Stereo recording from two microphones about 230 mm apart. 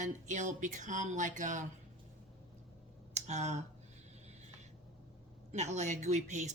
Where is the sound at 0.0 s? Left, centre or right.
Right.